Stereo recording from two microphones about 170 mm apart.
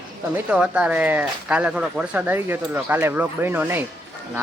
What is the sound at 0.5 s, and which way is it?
Speech, 5° right (ahead or behind).